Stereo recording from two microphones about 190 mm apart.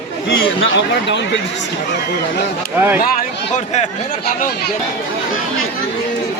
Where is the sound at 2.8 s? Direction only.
10° right (ahead or behind).